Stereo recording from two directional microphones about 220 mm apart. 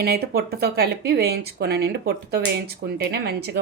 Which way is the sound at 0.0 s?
45° right (ahead or behind).